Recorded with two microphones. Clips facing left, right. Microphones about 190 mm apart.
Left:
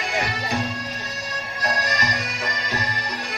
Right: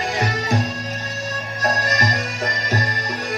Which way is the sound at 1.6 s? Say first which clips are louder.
Right 4 dB; 45° right (ahead or behind).